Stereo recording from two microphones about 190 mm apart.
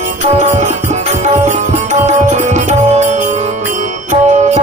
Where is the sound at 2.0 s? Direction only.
40° right (ahead or behind).